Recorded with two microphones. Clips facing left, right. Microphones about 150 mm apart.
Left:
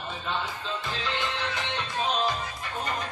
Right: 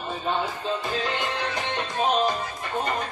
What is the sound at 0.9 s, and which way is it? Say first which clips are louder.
Music: right 4 dB; 45° right (ahead or behind).